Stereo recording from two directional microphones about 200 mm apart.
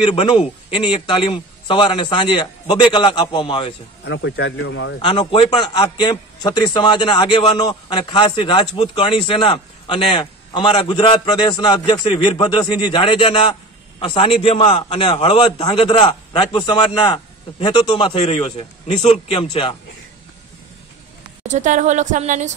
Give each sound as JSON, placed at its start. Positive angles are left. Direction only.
{"t": 0.1, "sound": "a man's voice", "side_deg": 25}
{"t": 4.0, "sound": "a man's voice", "side_deg": 65}
{"t": 5.0, "sound": "a man's voice", "side_deg": 25}
{"t": 21.5, "sound": "a woman's voice", "side_deg": -35}